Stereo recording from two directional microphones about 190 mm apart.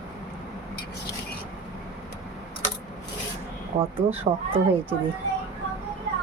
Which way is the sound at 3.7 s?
30° right (ahead or behind).